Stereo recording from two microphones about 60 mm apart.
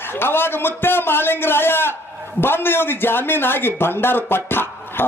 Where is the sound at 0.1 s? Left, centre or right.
Left.